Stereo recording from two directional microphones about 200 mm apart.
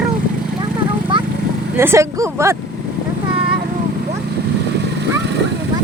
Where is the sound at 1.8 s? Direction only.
15° right (ahead or behind).